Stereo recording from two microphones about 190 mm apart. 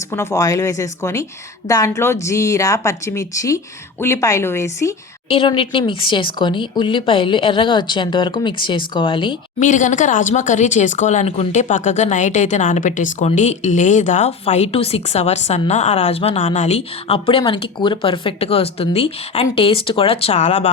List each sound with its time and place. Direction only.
0.1 s speech: 15° left (ahead or behind)
5.3 s speech: 30° left (ahead or behind)
9.6 s speech: 40° left (ahead or behind)